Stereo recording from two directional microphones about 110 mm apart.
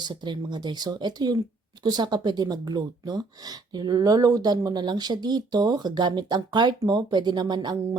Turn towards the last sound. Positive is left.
turn(degrees=-40)  # may be behind; listen again after turning